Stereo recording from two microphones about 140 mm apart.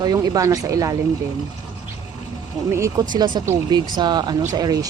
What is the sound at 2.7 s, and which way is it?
Speech, 20° right (ahead or behind).